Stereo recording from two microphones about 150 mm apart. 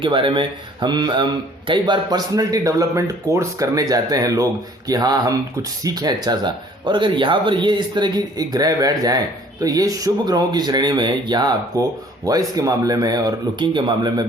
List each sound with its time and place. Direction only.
0.0 s speech: 35° right (ahead or behind)